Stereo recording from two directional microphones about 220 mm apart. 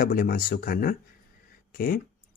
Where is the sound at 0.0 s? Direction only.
40° left (ahead or behind).